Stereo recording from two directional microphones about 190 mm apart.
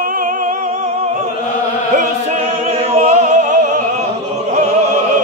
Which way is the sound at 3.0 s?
40° right (ahead or behind).